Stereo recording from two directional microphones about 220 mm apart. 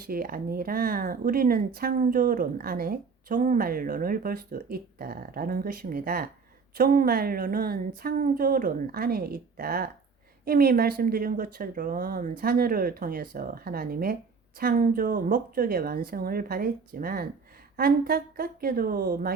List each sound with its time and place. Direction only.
0.0 s a woman's voice: 40° right (ahead or behind)